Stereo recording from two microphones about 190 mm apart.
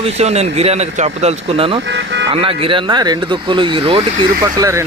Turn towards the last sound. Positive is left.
turn(degrees=-15)  # may be behind; listen again after turning